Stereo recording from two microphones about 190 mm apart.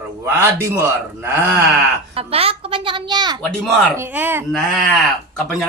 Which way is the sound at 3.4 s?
5° left (ahead or behind).